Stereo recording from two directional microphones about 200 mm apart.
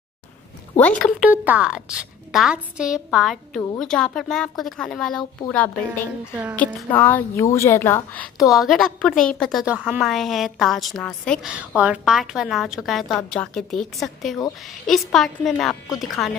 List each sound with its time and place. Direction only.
0.7 s speech: 5° left (ahead or behind)
1.2 s a woman's voice: 10° right (ahead or behind)
6.6 s a woman's voice: 10° left (ahead or behind)